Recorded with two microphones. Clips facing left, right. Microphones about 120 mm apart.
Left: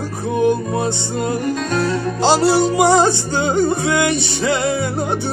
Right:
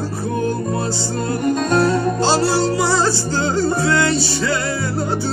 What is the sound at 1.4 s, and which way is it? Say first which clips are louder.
Music: right 3 dB; 50° right (ahead or behind).